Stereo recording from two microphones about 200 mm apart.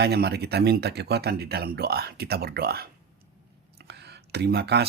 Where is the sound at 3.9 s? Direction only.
55° right (ahead or behind).